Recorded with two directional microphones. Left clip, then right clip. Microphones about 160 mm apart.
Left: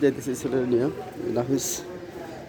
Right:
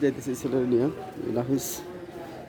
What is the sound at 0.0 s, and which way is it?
A man's voice, 30° right (ahead or behind).